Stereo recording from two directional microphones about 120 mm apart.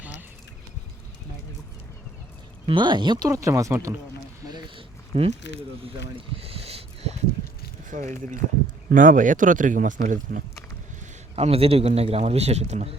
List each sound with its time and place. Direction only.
2.6 s speech: 40° right (ahead or behind)
3.2 s speech: 25° right (ahead or behind)
5.1 s speech: 55° right (ahead or behind)
5.8 s a sound: 50° right (ahead or behind)
7.9 s speech: 90° right
11.3 s a man's voice: 55° right (ahead or behind)